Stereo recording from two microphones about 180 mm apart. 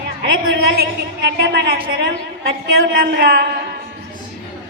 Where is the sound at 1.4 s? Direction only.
60° right (ahead or behind).